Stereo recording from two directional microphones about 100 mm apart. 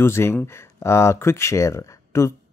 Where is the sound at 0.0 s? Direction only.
25° left (ahead or behind).